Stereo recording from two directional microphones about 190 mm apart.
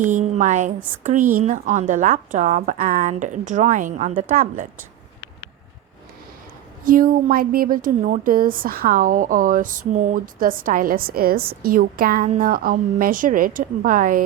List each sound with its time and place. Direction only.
0.0 s a woman's voice: 40° right (ahead or behind)
6.8 s a woman's voice: 45° right (ahead or behind)